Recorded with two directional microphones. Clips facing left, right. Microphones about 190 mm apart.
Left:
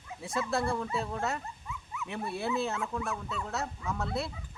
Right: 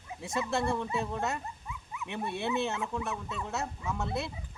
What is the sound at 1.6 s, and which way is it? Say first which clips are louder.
Dog: left 1 dB; 20° right (ahead or behind).